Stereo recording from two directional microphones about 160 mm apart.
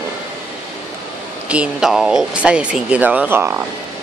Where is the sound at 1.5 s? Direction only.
5° right (ahead or behind).